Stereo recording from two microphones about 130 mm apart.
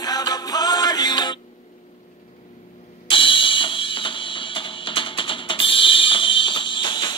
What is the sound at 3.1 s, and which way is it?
Music, 40° left (ahead or behind).